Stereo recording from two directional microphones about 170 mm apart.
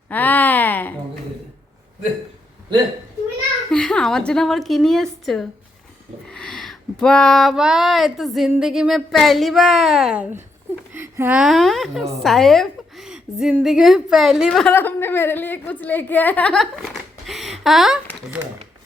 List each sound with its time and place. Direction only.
0.1 s a sound: 10° left (ahead or behind)
3.7 s a woman's voice: 5° left (ahead or behind)
18.4 s speech: 20° right (ahead or behind)